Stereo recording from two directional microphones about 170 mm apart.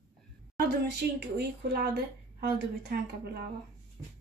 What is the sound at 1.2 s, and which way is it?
Speech, 70° right (ahead or behind).